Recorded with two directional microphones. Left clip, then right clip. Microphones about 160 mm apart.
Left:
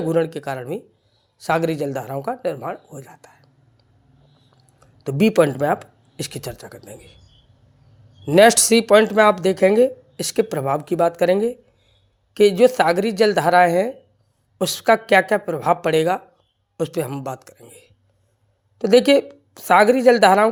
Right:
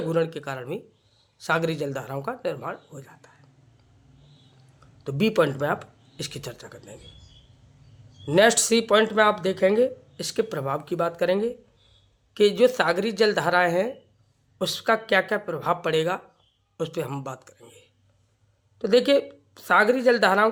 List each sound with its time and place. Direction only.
0.1 s speech: 35° left (ahead or behind)
5.0 s speech: 35° left (ahead or behind)
8.4 s speech: 40° left (ahead or behind)